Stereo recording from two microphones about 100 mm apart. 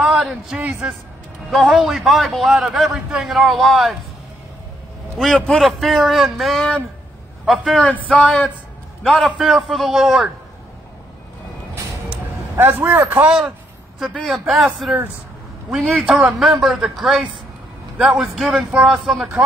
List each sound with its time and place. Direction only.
0.0 s a man's voice: 5° right (ahead or behind)
0.6 s speech: 15° right (ahead or behind)
1.5 s a man's voice: centre (ahead or behind)
5.2 s a man's voice: 5° left (ahead or behind)
12.5 s a man's voice: 20° right (ahead or behind)
14.2 s a man's voice: centre (ahead or behind)
16.0 s a man's voice: 5° right (ahead or behind)